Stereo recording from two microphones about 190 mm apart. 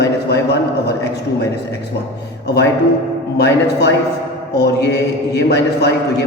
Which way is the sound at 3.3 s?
65° left (ahead or behind).